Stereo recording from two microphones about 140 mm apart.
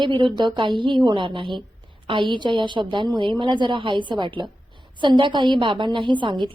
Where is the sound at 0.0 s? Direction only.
35° right (ahead or behind).